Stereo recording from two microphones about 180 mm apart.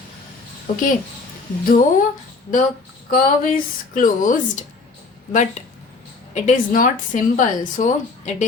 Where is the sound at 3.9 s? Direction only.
50° left (ahead or behind).